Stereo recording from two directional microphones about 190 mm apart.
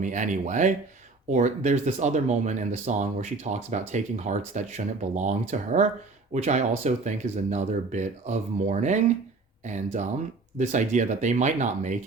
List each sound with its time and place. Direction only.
0.0 s speech: 40° right (ahead or behind)